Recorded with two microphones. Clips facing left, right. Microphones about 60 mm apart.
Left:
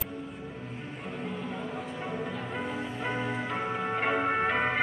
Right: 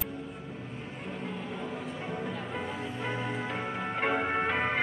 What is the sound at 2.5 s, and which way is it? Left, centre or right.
Music, centre.